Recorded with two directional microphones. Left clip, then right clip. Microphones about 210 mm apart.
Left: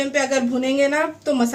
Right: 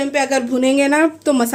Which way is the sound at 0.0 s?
35° right (ahead or behind).